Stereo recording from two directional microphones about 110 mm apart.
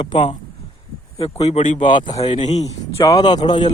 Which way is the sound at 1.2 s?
65° left (ahead or behind).